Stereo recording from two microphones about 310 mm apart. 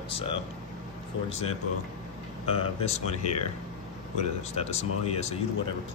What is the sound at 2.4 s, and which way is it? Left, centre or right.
Speech, centre.